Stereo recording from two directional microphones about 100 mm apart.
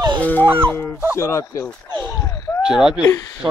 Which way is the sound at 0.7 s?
25° left (ahead or behind).